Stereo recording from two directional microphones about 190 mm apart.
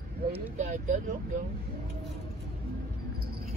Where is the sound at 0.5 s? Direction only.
40° right (ahead or behind).